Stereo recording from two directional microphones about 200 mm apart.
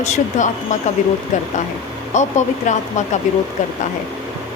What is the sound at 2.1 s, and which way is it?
Speech, 35° left (ahead or behind).